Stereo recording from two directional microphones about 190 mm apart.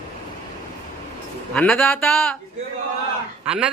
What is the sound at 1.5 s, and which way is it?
Speech, 5° left (ahead or behind).